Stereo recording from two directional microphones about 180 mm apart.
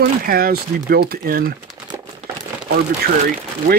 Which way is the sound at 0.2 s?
55° right (ahead or behind).